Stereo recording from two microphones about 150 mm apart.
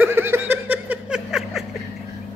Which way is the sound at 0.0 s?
15° right (ahead or behind).